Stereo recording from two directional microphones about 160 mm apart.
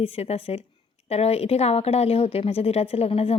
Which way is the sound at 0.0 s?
40° left (ahead or behind).